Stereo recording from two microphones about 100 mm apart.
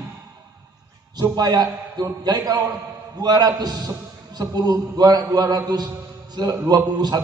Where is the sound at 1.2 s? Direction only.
40° right (ahead or behind).